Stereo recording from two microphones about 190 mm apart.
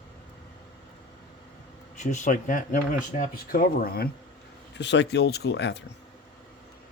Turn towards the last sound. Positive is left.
turn(degrees=65)  # may be behind; listen again after turning